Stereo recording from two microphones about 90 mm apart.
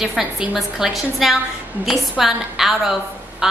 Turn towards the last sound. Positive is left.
turn(degrees=-5)  # may be behind; listen again after turning